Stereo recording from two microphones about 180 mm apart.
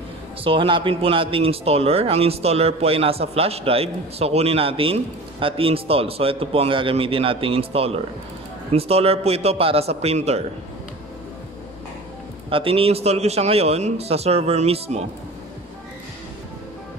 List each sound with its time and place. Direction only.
0.4 s speech: 30° right (ahead or behind)
12.4 s speech: 30° right (ahead or behind)